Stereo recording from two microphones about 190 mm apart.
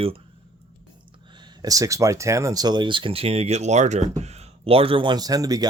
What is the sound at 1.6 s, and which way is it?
Speech, 20° right (ahead or behind).